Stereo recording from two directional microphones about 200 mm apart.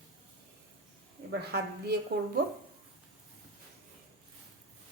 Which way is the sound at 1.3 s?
55° right (ahead or behind).